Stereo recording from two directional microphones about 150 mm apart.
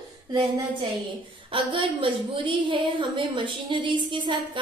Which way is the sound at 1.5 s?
35° right (ahead or behind).